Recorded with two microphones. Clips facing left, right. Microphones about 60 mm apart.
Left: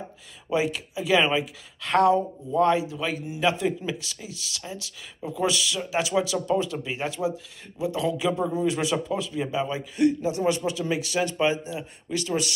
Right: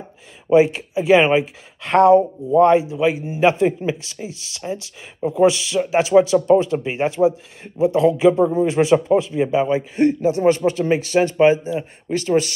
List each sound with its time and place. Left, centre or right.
0.5 s speech: right
3.3 s a man's voice: right